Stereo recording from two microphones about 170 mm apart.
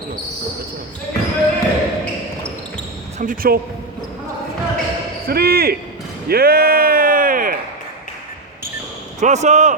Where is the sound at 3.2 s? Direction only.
55° right (ahead or behind).